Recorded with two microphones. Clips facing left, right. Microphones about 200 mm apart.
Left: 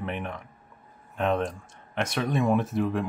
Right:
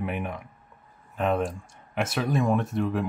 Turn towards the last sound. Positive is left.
turn(degrees=0)  # may be behind; listen again after turning